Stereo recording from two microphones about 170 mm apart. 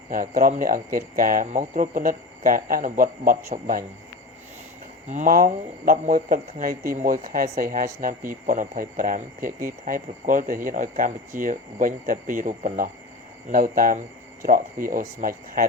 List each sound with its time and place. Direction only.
0.1 s speech: 55° right (ahead or behind)
5.0 s speech: 45° right (ahead or behind)